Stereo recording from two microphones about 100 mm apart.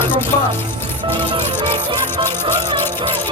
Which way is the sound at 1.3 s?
55° right (ahead or behind).